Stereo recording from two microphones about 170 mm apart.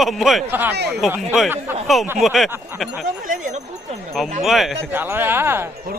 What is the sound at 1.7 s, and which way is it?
Speech, 15° right (ahead or behind).